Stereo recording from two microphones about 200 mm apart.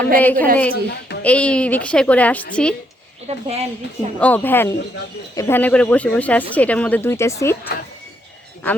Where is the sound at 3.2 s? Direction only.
30° right (ahead or behind).